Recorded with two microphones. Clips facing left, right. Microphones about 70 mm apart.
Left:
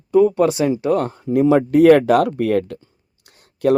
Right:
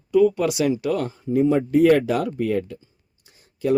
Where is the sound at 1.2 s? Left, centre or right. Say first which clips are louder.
Left 3 dB; left.